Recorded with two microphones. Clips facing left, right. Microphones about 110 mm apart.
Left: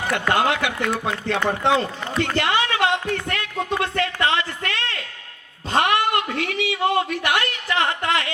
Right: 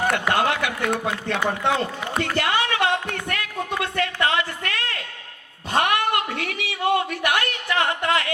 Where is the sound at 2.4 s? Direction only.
25° left (ahead or behind).